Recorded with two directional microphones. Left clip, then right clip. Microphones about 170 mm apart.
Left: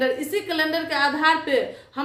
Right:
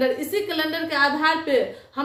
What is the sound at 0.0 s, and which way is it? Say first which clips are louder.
A woman's voice: right 1 dB; 20° left (ahead or behind).